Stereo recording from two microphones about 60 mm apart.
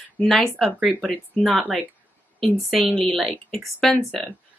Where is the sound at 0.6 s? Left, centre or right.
Centre.